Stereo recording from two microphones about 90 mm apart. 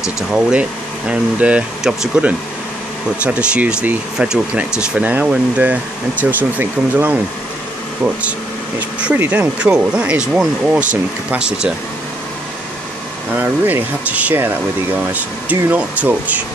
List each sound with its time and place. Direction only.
0.3 s speech: 10° right (ahead or behind)
8.2 s speech: 15° right (ahead or behind)
13.3 s speech: 20° right (ahead or behind)
15.7 s speech: 15° right (ahead or behind)